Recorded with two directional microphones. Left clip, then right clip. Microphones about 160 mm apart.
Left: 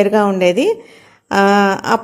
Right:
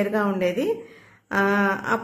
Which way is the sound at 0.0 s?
40° left (ahead or behind).